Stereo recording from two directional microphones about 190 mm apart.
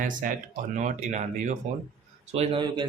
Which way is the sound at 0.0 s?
45° right (ahead or behind).